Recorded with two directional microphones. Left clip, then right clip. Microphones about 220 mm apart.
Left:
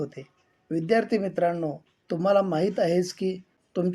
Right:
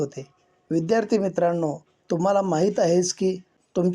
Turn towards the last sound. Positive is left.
turn(degrees=-15)  # may be behind; listen again after turning